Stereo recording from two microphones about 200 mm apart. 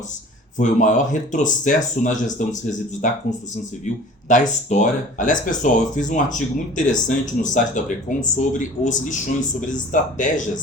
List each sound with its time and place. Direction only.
0.5 s speech: 40° left (ahead or behind)
4.3 s speech: 40° left (ahead or behind)